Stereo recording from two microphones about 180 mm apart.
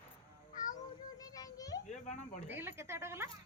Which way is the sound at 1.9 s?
40° left (ahead or behind).